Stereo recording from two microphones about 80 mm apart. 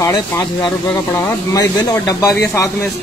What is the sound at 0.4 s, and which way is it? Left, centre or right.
Speech, left.